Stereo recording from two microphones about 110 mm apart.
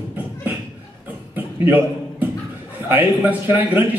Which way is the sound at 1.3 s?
15° right (ahead or behind).